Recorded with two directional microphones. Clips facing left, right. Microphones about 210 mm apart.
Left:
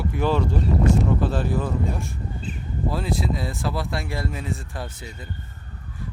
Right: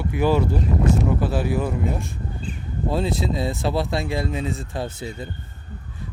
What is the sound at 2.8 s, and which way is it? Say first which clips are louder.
Speech: right 3 dB; 25° right (ahead or behind).